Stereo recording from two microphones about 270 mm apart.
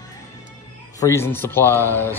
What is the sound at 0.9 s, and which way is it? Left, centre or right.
Speech, centre.